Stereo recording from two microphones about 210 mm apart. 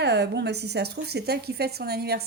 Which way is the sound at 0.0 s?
55° right (ahead or behind).